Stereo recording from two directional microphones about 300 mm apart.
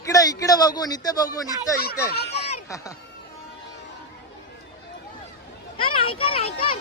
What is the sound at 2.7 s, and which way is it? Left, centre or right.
Speech, centre.